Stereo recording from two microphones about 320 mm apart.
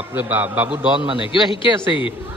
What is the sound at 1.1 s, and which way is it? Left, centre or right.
Speech, centre.